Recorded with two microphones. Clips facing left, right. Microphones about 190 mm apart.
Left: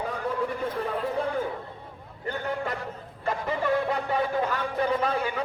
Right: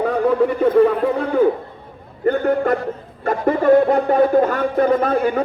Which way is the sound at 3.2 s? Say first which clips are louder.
Right 12 dB; 55° right (ahead or behind).